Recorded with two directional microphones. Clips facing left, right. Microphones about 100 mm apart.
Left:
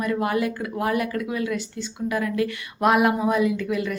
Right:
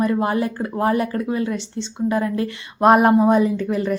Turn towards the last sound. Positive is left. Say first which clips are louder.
# right 3 dB
turn(degrees=-35)  # may be behind; listen again after turning